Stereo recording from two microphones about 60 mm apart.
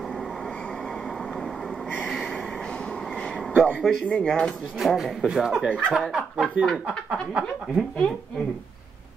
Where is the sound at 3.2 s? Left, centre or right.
Centre.